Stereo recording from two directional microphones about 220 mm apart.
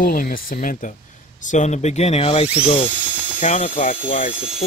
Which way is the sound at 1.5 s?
30° left (ahead or behind).